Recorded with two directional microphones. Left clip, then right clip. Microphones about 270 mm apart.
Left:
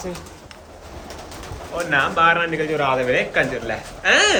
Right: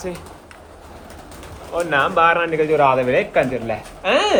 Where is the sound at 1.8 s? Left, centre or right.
Centre.